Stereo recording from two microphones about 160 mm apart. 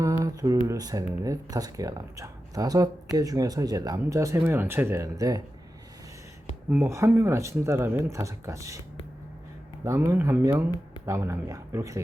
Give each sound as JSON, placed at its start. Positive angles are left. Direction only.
{"t": 0.0, "sound": "a sound", "side_deg": -20}
{"t": 0.7, "sound": "speech", "side_deg": -20}
{"t": 6.7, "sound": "speech", "side_deg": -15}
{"t": 9.8, "sound": "speech", "side_deg": -20}